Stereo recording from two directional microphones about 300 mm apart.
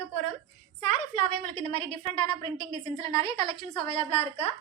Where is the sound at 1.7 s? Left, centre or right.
Centre.